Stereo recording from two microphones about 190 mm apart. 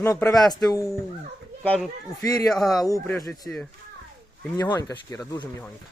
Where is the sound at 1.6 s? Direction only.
5° left (ahead or behind).